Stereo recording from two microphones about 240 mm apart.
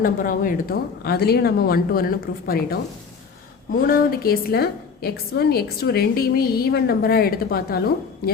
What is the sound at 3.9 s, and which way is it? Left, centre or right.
A woman's voice, left.